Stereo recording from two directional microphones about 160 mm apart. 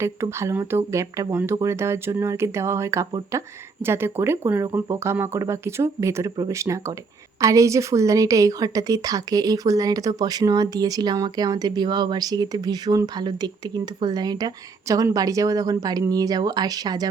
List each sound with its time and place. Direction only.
0.0 s a woman's voice: 15° right (ahead or behind)